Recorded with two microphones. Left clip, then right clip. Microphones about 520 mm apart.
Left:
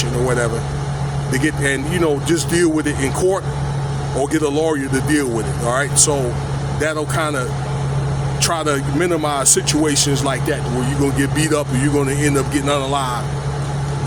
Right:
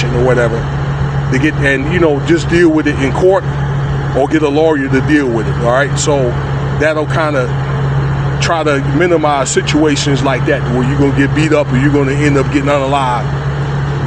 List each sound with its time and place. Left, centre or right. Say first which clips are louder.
1.3 s a man's voice: right 6 dB; left